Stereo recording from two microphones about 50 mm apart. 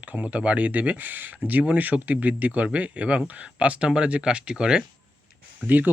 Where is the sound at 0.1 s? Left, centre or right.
Right.